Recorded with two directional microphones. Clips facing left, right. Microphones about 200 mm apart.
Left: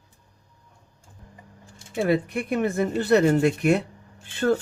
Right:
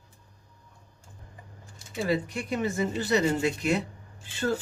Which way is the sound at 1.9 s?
55° left (ahead or behind).